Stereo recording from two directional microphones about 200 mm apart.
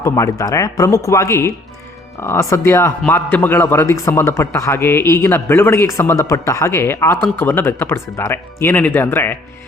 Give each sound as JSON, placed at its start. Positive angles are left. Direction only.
{"t": 0.0, "sound": "a man's voice", "side_deg": 15}